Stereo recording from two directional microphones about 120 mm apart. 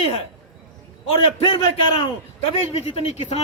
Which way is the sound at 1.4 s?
50° left (ahead or behind).